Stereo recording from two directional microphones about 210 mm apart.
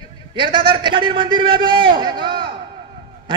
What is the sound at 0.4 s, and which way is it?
A man's voice, 25° right (ahead or behind).